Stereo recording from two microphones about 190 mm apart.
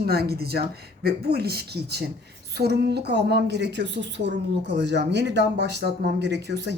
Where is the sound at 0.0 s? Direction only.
55° right (ahead or behind).